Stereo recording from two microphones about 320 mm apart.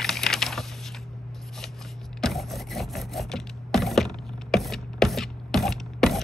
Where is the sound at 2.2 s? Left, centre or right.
Centre.